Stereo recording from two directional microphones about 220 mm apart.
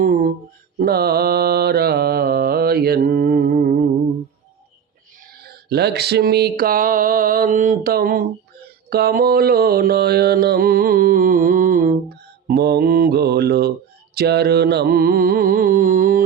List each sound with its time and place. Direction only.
0.0 s a sound: 40° right (ahead or behind)
0.8 s mantra: 45° right (ahead or behind)
5.4 s mantra: 45° right (ahead or behind)